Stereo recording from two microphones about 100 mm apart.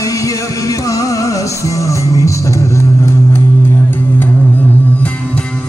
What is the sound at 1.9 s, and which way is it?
Music, 30° left (ahead or behind).